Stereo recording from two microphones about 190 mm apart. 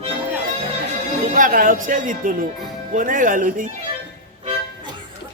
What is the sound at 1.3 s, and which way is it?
Speech, 45° right (ahead or behind).